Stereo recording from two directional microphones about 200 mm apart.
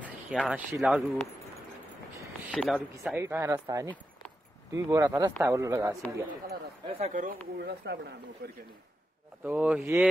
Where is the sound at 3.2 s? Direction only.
15° right (ahead or behind).